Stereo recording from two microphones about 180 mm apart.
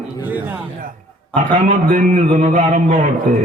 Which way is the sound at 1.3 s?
45° right (ahead or behind).